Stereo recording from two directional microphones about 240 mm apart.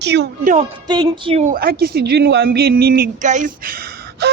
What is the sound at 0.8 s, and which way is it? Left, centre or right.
A woman's voice, centre.